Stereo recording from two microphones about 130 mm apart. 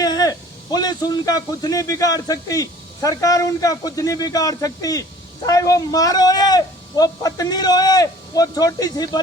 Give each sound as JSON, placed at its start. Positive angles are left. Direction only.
{"t": 0.0, "sound": "a man's voice", "side_deg": 30}